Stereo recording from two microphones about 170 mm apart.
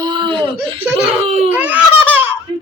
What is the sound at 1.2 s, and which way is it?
Speech, 40° right (ahead or behind).